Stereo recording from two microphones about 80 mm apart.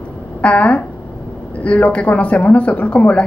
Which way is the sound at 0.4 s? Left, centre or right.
Centre.